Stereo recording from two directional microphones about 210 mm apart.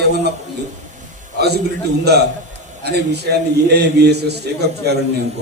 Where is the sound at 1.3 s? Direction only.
50° right (ahead or behind).